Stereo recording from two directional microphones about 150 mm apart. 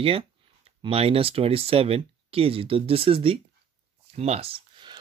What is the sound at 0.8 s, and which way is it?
Speech, 40° right (ahead or behind).